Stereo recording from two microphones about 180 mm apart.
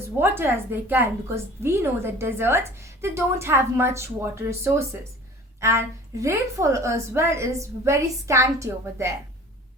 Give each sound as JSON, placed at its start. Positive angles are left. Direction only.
{"t": 0.2, "sound": "a woman's voice", "side_deg": -10}